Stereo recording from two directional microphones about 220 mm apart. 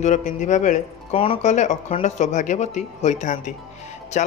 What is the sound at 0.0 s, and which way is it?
Speech, 35° left (ahead or behind).